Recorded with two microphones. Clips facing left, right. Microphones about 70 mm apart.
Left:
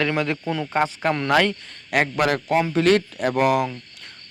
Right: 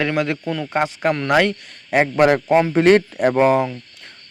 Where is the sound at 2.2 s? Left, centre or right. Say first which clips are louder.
Right 8 dB; right.